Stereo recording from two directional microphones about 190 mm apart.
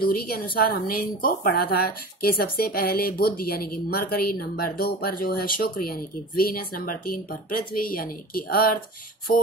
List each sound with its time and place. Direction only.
0.1 s speech: 50° left (ahead or behind)